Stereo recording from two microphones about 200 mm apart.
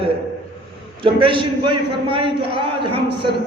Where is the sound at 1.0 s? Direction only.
25° right (ahead or behind).